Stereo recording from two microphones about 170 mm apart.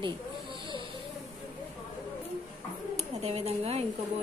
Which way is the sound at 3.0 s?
35° right (ahead or behind).